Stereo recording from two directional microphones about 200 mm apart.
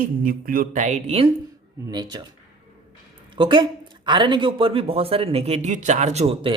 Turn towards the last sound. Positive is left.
turn(degrees=-25)  # may be behind; listen again after turning